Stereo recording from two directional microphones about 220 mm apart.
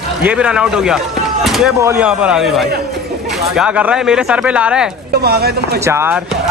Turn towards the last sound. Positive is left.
turn(degrees=-10)  # may be behind; listen again after turning